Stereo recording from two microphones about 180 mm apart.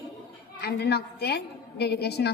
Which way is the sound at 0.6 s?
60° left (ahead or behind).